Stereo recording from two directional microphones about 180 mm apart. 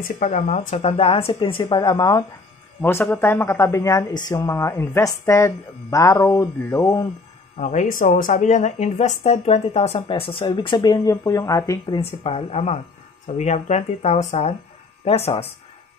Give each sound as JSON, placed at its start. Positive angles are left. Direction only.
{"t": 0.2, "sound": "a woman's voice", "side_deg": 40}
{"t": 7.5, "sound": "a woman's voice", "side_deg": 40}